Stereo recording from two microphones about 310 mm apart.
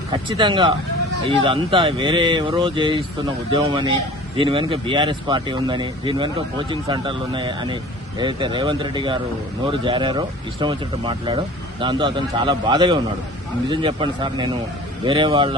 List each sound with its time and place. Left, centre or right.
0.1 s speech: centre